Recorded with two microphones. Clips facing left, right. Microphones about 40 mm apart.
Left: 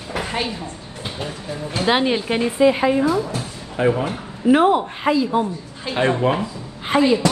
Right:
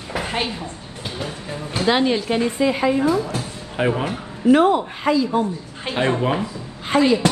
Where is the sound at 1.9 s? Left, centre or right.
Centre.